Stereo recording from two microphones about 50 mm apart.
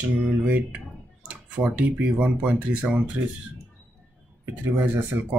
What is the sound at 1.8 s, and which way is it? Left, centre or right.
Speech, right.